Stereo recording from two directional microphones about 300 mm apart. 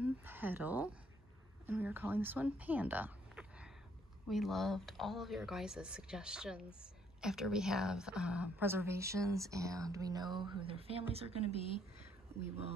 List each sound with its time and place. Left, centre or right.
0.0 s a sound: centre
1.7 s speech: centre
12.3 s speech: centre